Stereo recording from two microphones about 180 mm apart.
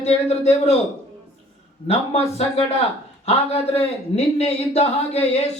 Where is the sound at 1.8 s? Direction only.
35° left (ahead or behind).